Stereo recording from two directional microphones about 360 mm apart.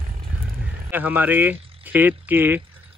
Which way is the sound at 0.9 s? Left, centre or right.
Centre.